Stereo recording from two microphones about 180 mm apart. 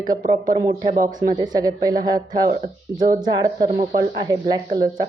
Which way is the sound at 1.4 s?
20° right (ahead or behind).